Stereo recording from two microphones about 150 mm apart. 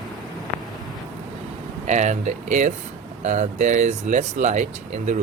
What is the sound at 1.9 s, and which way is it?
Speech, 50° right (ahead or behind).